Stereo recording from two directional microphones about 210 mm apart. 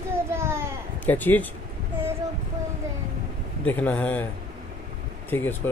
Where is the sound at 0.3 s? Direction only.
10° right (ahead or behind).